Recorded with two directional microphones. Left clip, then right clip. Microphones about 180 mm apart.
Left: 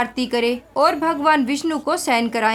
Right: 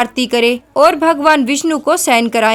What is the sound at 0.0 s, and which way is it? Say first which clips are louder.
A woman's voice: right 7 dB; 35° right (ahead or behind).